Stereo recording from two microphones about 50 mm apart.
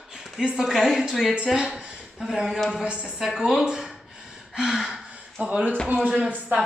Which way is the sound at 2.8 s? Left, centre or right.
Centre.